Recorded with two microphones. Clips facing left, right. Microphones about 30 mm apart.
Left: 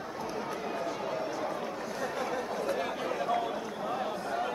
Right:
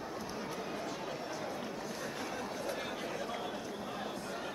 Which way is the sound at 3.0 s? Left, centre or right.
Left.